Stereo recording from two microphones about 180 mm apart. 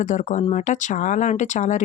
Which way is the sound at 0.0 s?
45° left (ahead or behind).